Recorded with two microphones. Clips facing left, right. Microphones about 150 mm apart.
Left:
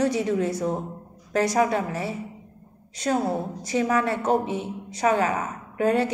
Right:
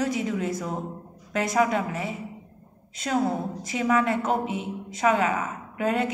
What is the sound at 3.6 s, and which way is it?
A woman's voice, 35° left (ahead or behind).